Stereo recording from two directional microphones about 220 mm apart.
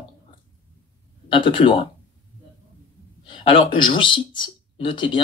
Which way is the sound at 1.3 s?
20° left (ahead or behind).